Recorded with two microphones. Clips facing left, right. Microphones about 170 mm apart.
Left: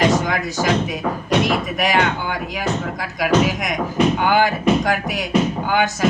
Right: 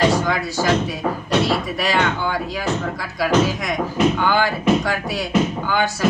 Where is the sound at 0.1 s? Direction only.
20° left (ahead or behind).